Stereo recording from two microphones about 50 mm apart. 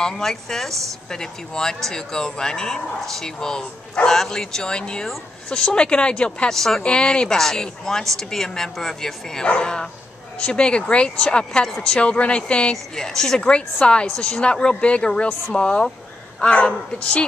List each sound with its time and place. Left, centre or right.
0.0 s a woman's voice: centre
6.5 s a woman's voice: centre
6.8 s a woman's voice: centre
13.4 s a woman's voice: left